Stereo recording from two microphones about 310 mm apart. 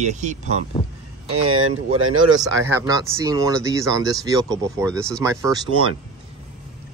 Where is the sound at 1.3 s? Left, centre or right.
Right.